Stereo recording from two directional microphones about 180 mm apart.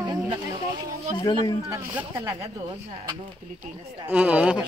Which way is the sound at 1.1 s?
25° left (ahead or behind).